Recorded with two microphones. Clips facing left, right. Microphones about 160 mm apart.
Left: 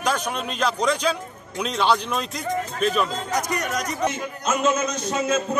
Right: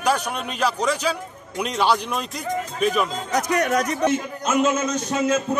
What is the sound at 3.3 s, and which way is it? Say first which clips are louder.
Speech: right 4 dB; 60° right (ahead or behind).